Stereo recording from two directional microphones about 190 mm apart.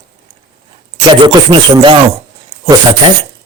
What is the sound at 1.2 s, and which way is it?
Speech, 25° right (ahead or behind).